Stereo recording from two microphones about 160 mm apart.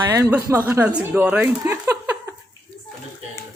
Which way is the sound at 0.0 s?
20° right (ahead or behind).